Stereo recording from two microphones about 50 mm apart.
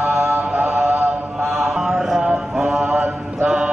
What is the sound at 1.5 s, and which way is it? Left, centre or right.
Mantra, centre.